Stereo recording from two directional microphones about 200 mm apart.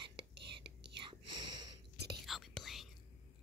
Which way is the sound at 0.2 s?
55° right (ahead or behind).